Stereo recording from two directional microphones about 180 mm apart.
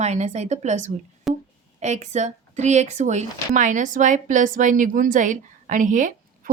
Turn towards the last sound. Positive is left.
turn(degrees=-45)  # may be behind; listen again after turning